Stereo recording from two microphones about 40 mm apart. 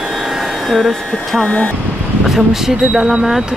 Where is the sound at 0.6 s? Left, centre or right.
Centre.